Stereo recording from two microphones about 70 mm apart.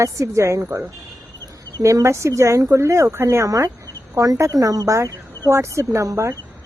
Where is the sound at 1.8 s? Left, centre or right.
Right.